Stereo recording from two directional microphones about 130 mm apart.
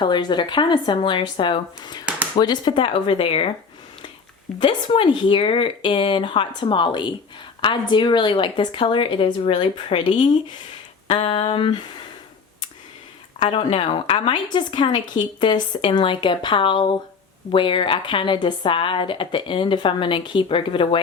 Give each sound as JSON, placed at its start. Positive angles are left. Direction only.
{"t": 0.0, "sound": "a woman's voice", "side_deg": 35}
{"t": 4.6, "sound": "a woman's voice", "side_deg": 40}
{"t": 13.4, "sound": "a woman's voice", "side_deg": 40}